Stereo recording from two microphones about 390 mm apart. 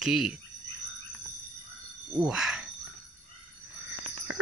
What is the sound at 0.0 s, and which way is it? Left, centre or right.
Speech, centre.